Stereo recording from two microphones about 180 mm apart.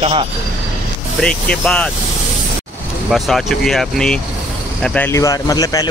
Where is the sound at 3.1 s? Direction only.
Centre (ahead or behind).